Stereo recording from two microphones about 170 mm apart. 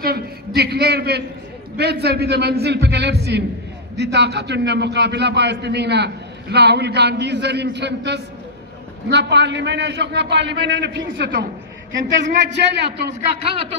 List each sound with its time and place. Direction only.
0.6 s a man's voice: 70° right (ahead or behind); by 13.0 s 85° right
13.4 s speech: 35° right (ahead or behind)